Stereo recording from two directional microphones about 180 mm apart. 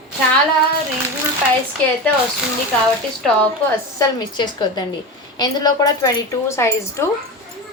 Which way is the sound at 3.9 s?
25° left (ahead or behind).